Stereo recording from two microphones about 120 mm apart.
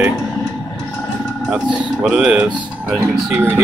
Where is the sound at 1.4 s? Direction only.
10° right (ahead or behind).